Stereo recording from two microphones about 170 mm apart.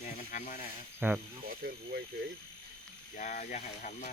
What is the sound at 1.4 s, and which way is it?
Speech, 60° right (ahead or behind).